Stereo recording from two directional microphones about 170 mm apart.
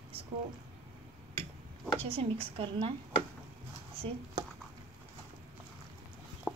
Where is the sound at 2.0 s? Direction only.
35° right (ahead or behind).